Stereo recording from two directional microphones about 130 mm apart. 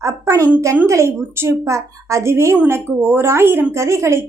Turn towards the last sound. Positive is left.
turn(degrees=-20)  # may be behind; listen again after turning